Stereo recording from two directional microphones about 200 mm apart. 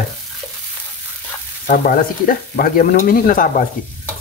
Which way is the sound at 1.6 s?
45° left (ahead or behind).